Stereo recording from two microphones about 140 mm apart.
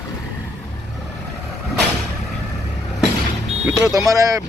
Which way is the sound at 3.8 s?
25° right (ahead or behind).